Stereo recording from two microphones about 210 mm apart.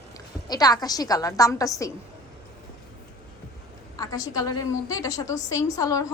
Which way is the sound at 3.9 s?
15° left (ahead or behind).